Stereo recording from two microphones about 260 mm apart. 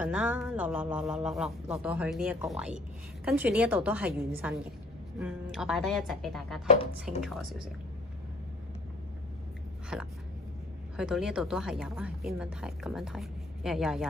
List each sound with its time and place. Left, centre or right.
0.0 s a woman's voice: centre
6.7 s speech: left
7.2 s a woman's voice: centre
9.9 s a woman's voice: centre